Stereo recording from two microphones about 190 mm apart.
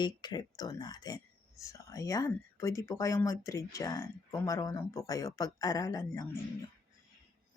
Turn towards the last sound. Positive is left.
turn(degrees=15)  # may be behind; listen again after turning